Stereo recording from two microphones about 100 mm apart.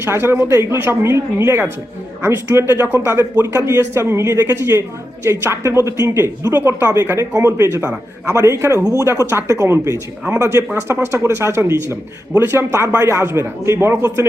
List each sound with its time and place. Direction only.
0.0 s a man's voice: 25° right (ahead or behind)